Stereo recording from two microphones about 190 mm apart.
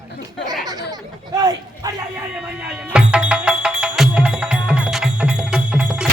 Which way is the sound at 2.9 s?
5° right (ahead or behind).